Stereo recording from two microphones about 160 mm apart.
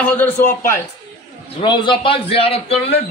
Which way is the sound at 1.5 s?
30° left (ahead or behind).